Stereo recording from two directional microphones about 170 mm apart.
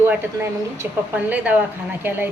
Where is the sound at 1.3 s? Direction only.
10° right (ahead or behind).